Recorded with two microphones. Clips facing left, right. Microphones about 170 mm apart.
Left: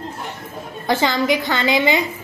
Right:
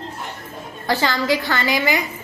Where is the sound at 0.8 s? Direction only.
20° left (ahead or behind).